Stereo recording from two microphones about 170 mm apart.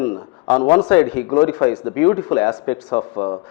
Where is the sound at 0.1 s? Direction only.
25° left (ahead or behind).